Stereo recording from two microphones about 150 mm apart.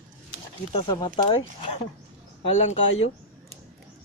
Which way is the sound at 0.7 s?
35° left (ahead or behind).